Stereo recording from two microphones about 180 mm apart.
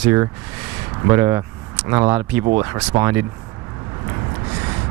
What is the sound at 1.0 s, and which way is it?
Speech, 15° right (ahead or behind).